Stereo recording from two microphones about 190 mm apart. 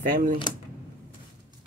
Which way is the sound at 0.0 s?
45° right (ahead or behind).